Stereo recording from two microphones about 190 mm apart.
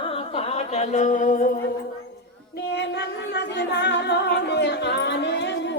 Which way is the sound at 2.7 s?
65° left (ahead or behind).